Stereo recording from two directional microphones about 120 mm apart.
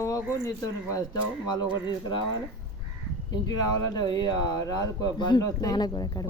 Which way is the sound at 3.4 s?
35° left (ahead or behind).